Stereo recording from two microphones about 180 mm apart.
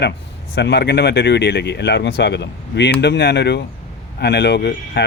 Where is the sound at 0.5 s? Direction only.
70° left (ahead or behind).